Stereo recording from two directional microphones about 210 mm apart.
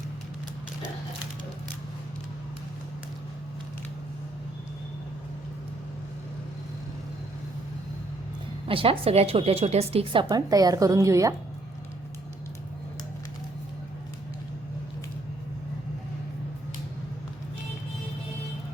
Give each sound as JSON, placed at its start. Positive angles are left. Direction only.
{"t": 8.6, "sound": "a woman's voice", "side_deg": -25}